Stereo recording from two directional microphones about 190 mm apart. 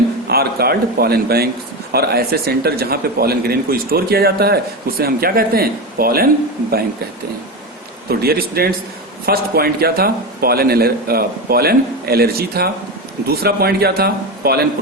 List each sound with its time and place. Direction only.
0.3 s a man's voice: 55° right (ahead or behind)
8.2 s a man's voice: 55° right (ahead or behind)